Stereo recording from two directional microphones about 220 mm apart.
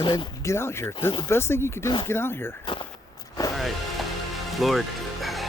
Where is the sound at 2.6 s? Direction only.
20° left (ahead or behind).